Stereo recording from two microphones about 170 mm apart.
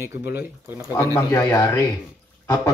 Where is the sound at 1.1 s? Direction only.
15° left (ahead or behind).